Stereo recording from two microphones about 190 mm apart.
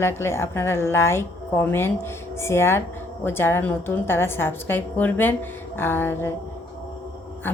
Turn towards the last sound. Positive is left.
turn(degrees=10)  # may be behind; listen again after turning